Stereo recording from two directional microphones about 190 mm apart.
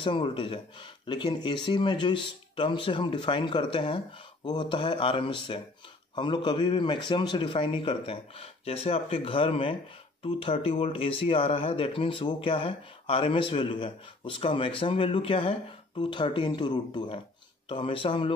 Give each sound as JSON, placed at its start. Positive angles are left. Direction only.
{"t": 0.0, "sound": "speech", "side_deg": 30}